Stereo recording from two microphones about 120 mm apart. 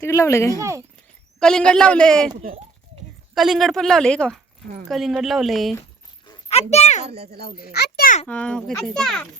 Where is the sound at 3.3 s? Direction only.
Centre (ahead or behind).